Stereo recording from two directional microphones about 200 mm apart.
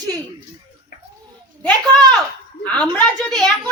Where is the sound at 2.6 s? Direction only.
5° left (ahead or behind).